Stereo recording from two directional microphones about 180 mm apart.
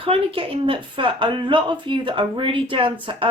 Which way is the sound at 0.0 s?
30° right (ahead or behind).